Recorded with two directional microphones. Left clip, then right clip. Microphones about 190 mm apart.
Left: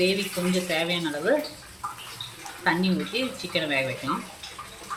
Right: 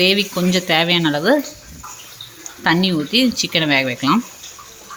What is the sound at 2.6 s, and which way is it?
A woman's voice, 65° right (ahead or behind).